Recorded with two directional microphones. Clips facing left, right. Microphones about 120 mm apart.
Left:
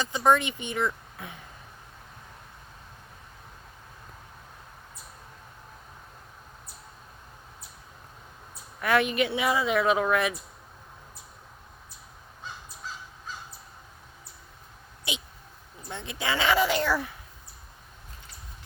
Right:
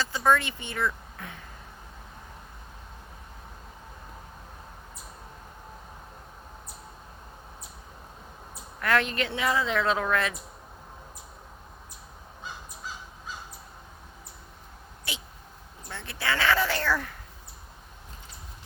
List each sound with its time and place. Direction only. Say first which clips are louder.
0.0 s speech: left 1 dB; 20° left (ahead or behind)
8.8 s a woman's voice: left 2 dB; 15° left (ahead or behind)
15.1 s a sound: left 4 dB; 20° left (ahead or behind)
15.9 s a woman's voice: even; 20° left (ahead or behind)